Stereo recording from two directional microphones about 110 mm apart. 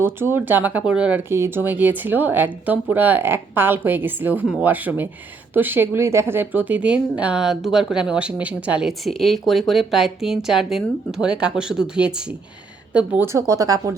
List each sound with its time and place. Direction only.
0.0 s a woman's voice: 20° right (ahead or behind)
1.3 s a woman's voice: 20° right (ahead or behind)
13.2 s speech: 25° right (ahead or behind)